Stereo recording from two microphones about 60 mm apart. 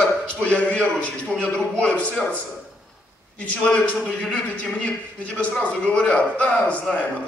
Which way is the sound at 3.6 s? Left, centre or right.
Centre.